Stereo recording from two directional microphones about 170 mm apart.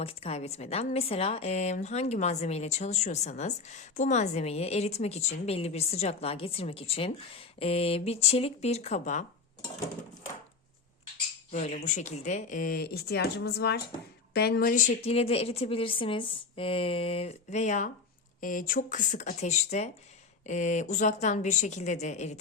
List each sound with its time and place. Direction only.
0.0 s a woman's voice: 35° left (ahead or behind)
11.5 s a woman's voice: 45° left (ahead or behind)